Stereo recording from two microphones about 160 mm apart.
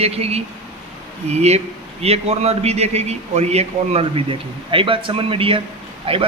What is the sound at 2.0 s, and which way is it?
A man's voice, 40° right (ahead or behind).